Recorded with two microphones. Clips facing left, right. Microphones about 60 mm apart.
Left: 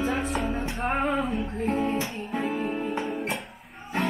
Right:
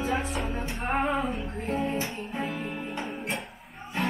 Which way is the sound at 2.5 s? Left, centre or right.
Left.